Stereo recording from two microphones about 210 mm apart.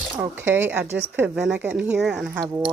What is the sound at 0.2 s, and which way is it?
Speech, 10° right (ahead or behind).